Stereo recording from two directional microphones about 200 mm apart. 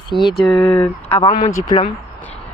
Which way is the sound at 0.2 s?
Centre (ahead or behind).